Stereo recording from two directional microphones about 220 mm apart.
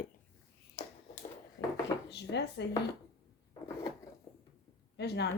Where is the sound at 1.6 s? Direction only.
55° left (ahead or behind).